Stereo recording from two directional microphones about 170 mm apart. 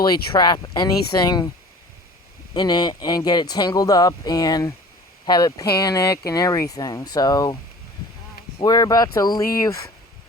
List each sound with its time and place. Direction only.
0.0 s speech: 25° left (ahead or behind)
2.6 s speech: 25° left (ahead or behind)